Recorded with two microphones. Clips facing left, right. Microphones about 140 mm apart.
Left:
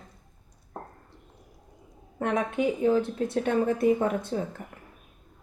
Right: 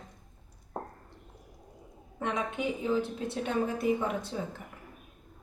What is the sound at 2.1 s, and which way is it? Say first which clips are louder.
A woman's voice: left 6 dB; 55° left (ahead or behind).